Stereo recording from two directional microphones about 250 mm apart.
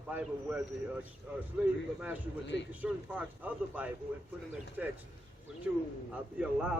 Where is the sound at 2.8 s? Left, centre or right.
Centre.